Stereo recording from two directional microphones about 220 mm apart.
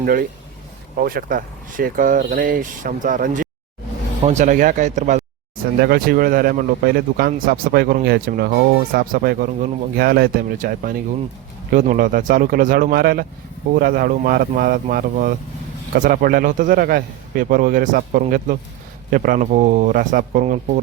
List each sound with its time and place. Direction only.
0.0 s speech: 40° right (ahead or behind)
5.8 s speech: 45° right (ahead or behind)